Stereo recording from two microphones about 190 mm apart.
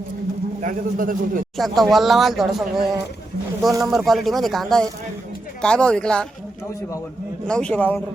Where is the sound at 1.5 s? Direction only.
Centre (ahead or behind).